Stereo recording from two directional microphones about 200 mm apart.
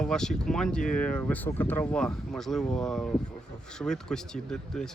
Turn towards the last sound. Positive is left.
turn(degrees=5)  # may be behind; listen again after turning